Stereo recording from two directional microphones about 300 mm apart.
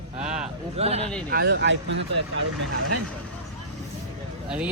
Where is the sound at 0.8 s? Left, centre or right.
Right.